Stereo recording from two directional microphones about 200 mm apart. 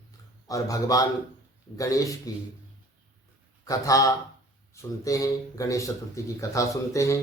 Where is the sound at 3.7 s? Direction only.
15° left (ahead or behind).